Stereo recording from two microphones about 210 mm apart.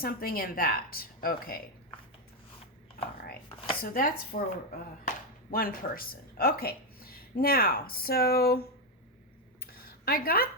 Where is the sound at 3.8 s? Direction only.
45° left (ahead or behind).